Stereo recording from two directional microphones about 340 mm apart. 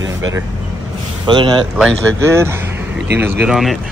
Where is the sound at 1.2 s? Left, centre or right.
Centre.